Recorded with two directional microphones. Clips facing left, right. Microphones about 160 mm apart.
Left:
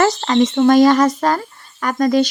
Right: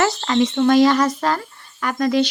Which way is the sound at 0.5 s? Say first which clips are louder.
Left 3 dB; 45° left (ahead or behind).